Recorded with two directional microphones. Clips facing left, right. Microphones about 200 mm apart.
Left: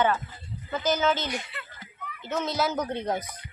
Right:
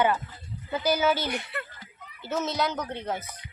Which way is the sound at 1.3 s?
60° right (ahead or behind).